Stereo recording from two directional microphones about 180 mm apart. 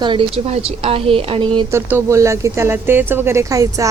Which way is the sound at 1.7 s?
15° right (ahead or behind).